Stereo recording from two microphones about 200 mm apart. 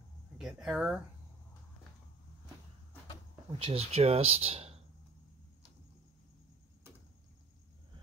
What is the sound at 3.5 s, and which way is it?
Speech, 30° right (ahead or behind).